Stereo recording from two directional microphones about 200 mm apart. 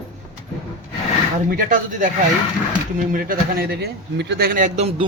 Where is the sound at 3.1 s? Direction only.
45° right (ahead or behind).